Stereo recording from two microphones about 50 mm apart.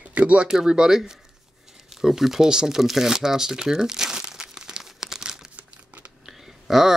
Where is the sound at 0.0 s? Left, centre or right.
Right.